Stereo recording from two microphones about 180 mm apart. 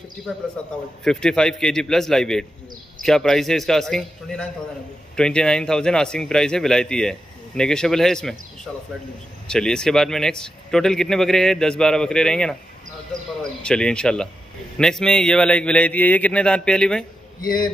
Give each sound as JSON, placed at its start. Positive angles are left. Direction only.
{"t": 1.0, "sound": "a man's voice", "side_deg": 5}
{"t": 9.5, "sound": "a man's voice", "side_deg": 5}
{"t": 17.4, "sound": "a man's voice", "side_deg": 55}